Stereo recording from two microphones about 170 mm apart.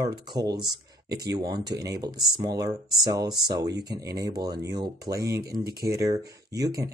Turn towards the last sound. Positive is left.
turn(degrees=-20)  # may be behind; listen again after turning